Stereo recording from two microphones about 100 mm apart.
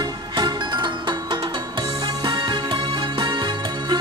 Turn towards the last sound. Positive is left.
turn(degrees=-50)  # may be behind; listen again after turning